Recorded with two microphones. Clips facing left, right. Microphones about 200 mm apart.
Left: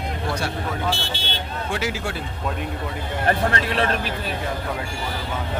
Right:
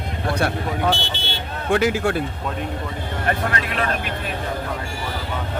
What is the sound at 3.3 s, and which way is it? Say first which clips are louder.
Speech: left 2 dB; 30° left (ahead or behind).